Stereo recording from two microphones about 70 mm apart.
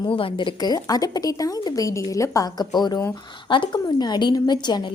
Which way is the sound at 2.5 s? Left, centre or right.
Left.